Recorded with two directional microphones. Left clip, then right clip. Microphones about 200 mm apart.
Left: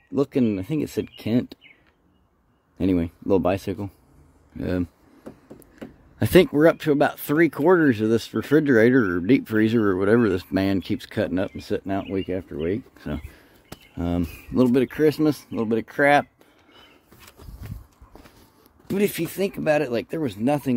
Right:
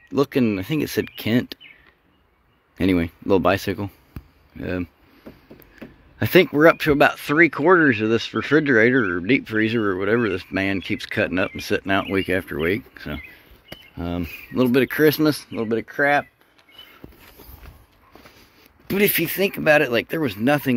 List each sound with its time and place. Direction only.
0.1 s speech: 10° left (ahead or behind)
2.8 s speech: 5° left (ahead or behind)
4.6 s speech: 20° left (ahead or behind)
8.9 s speech: 10° left (ahead or behind)
9.2 s speech: 25° left (ahead or behind); by 12.7 s centre (ahead or behind)
12.7 s speech: 20° left (ahead or behind)
14.7 s speech: 5° left (ahead or behind); by 16.3 s 30° left (ahead or behind)
18.9 s speech: 5° left (ahead or behind)